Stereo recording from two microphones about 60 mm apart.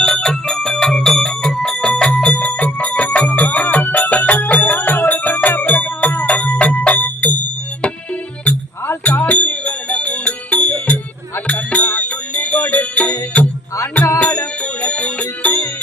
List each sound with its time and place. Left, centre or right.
0.0 s music: centre
8.5 s music: left